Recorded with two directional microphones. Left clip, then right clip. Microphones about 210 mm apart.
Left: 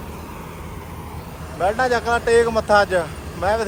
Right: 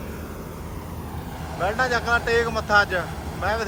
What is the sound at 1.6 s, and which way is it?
Speech, centre (ahead or behind).